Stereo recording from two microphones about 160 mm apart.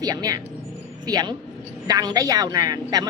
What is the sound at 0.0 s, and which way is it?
A woman's voice, 25° right (ahead or behind).